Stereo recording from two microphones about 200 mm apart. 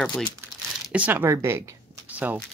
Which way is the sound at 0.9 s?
10° right (ahead or behind).